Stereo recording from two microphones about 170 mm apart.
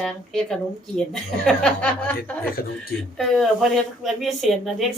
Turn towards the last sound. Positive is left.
turn(degrees=0)  # may be behind; listen again after turning